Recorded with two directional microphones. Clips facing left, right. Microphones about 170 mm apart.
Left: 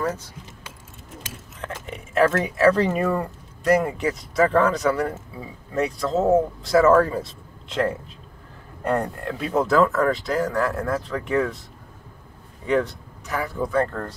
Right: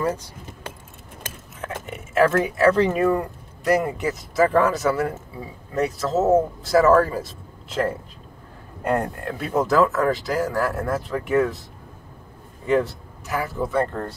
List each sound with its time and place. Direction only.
1.2 s a sound: 55° right (ahead or behind)
1.9 s speech: 5° right (ahead or behind)
12.6 s speech: 5° right (ahead or behind)